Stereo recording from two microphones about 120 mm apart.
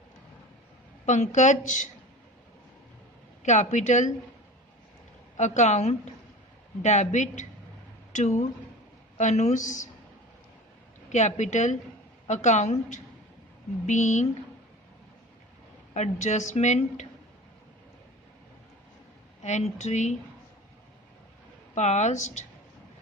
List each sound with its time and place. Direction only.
1.0 s a woman's voice: 80° left
3.4 s speech: 80° left
5.4 s a woman's voice: 80° left
6.8 s a woman's voice: 80° left
11.1 s a woman's voice: 75° left (ahead or behind)
13.8 s a woman's voice: 90° left
16.0 s a woman's voice: 75° left (ahead or behind)
19.4 s a woman's voice: 70° left (ahead or behind)
21.8 s a woman's voice: 75° left (ahead or behind)